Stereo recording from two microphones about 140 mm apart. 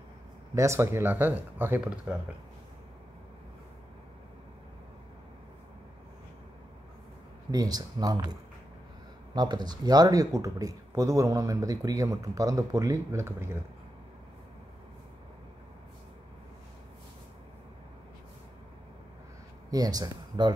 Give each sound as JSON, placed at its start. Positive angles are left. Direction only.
{"t": 0.6, "sound": "speech", "side_deg": -20}
{"t": 7.5, "sound": "speech", "side_deg": -25}
{"t": 9.3, "sound": "speech", "side_deg": -30}
{"t": 19.7, "sound": "speech", "side_deg": -25}